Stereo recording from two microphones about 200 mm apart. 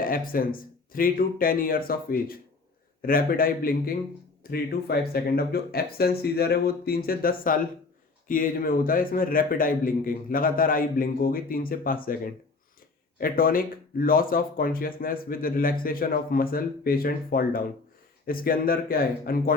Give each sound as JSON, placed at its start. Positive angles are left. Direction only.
{"t": 0.0, "sound": "speech", "side_deg": 45}